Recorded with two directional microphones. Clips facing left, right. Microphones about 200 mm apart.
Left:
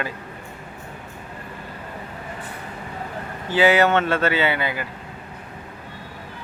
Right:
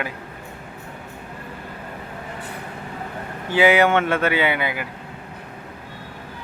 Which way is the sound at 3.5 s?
10° right (ahead or behind).